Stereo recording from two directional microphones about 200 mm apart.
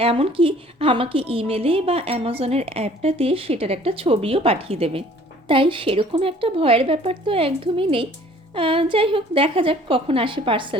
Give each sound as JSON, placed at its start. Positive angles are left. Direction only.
{"t": 0.0, "sound": "a woman's voice", "side_deg": -25}